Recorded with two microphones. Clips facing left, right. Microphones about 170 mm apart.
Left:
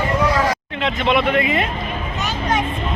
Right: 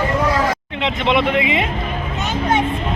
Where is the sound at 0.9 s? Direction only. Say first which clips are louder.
Even; 20° right (ahead or behind).